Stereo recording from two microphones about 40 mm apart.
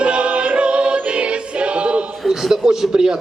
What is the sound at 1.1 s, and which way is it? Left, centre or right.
Music, right.